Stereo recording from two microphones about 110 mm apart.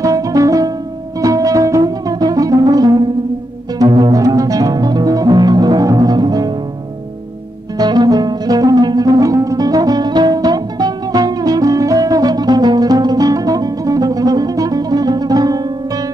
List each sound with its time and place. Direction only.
0.0 s music: 30° right (ahead or behind)
7.7 s music: 40° right (ahead or behind)